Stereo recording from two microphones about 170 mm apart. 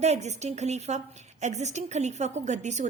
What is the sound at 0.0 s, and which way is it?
A woman's voice, 40° right (ahead or behind).